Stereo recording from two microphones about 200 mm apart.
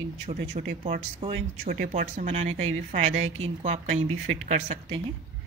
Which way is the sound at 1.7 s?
40° right (ahead or behind).